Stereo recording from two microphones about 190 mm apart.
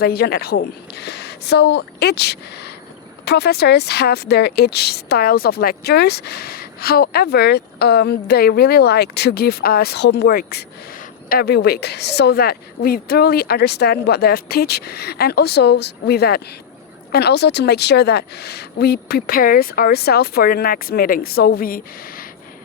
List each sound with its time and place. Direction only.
0.0 s speech: 55° left (ahead or behind)